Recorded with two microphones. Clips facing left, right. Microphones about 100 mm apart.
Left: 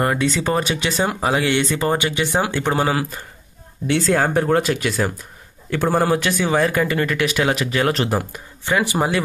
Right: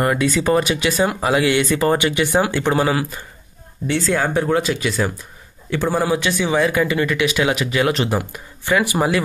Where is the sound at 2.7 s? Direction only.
35° left (ahead or behind).